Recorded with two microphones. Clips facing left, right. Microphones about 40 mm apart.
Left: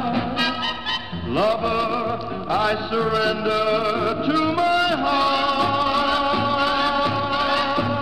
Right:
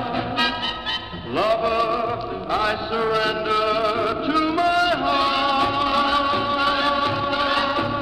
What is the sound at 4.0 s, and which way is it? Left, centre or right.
Music, centre.